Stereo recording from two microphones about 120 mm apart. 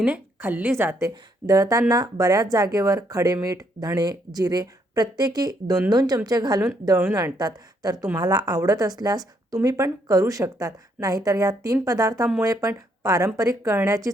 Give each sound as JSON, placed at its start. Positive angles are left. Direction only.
{"t": 0.0, "sound": "a woman's voice", "side_deg": -15}